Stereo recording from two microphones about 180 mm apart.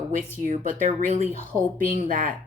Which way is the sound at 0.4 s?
45° right (ahead or behind).